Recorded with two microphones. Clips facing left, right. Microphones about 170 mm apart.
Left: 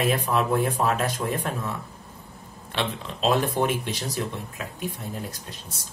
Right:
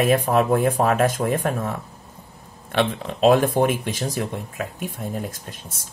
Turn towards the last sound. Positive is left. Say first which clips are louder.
# right 4 dB
turn(degrees=-50)  # may be behind; listen again after turning